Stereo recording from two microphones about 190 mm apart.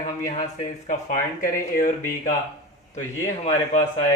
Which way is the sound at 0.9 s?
45° left (ahead or behind).